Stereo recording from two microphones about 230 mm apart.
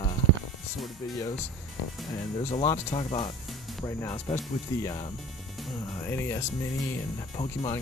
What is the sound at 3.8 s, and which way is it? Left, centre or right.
Speech, centre.